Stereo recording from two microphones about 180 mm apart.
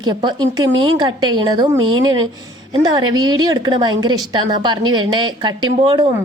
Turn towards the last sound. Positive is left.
turn(degrees=-25)  # may be behind; listen again after turning